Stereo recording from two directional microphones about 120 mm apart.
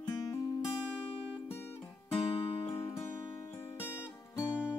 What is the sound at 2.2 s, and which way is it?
Music, 50° left (ahead or behind).